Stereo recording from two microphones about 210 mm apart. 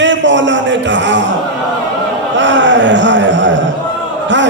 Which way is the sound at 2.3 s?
60° right (ahead or behind).